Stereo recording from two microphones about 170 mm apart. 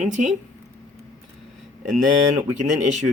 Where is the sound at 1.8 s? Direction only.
45° right (ahead or behind).